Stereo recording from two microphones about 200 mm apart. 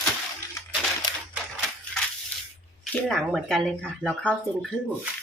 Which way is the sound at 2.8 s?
Centre (ahead or behind).